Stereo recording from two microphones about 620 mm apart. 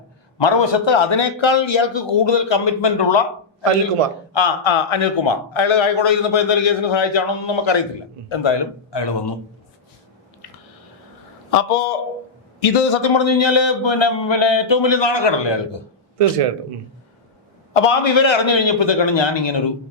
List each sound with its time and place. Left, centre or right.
0.3 s a man's voice: left
4.3 s a man's voice: left
11.5 s a man's voice: left
17.7 s a man's voice: left